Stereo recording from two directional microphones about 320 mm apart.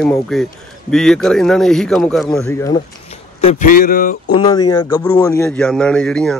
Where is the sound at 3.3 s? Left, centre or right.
Left.